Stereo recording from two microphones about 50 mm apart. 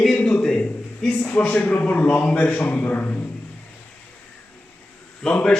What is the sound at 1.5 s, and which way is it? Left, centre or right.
A man's voice, left.